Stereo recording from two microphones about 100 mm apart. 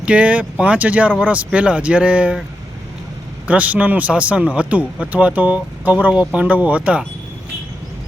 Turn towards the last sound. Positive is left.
turn(degrees=-15)  # may be behind; listen again after turning